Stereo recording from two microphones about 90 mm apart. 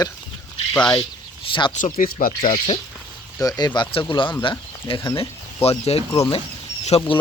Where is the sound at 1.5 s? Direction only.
85° left.